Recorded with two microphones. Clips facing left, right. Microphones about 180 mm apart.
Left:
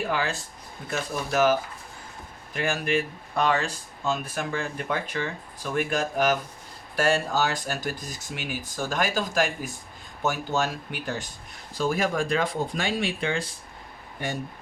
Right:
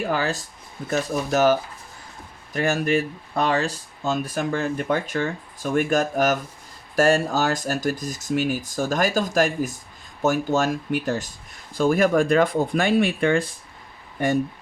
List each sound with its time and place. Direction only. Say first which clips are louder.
0.1 s speech: right 4 dB; 40° right (ahead or behind)
11.7 s speech: right 7 dB; 55° right (ahead or behind)